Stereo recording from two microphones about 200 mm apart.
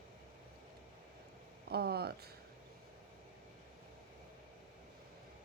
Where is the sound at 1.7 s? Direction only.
50° right (ahead or behind).